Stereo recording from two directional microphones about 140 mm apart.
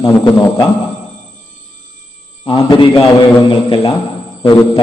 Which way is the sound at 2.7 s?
40° left (ahead or behind).